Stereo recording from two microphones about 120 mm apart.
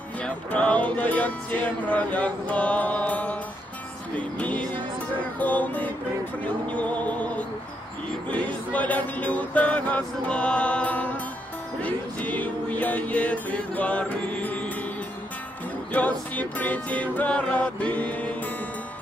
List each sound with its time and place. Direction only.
0.2 s music: 10° left (ahead or behind)
4.4 s music: 10° left (ahead or behind)
15.9 s music: 10° left (ahead or behind)